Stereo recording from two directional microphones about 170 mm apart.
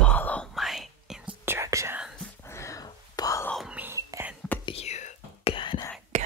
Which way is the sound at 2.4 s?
15° left (ahead or behind).